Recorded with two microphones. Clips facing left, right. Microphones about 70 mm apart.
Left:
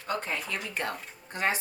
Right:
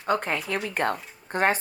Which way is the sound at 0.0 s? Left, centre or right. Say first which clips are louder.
Right 6 dB; right.